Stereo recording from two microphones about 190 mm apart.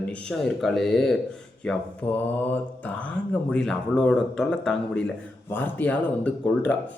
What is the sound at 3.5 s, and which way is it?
A man's voice, 5° left (ahead or behind).